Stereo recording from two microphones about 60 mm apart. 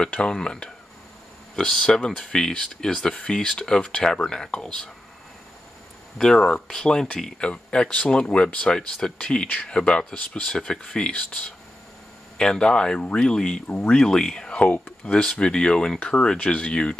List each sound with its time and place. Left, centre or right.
0.0 s speech: centre
6.1 s speech: centre